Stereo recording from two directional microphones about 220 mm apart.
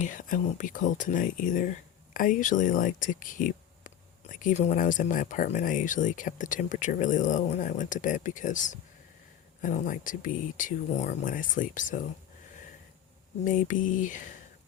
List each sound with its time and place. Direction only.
0.0 s speech: 35° left (ahead or behind)
13.4 s speech: 35° left (ahead or behind)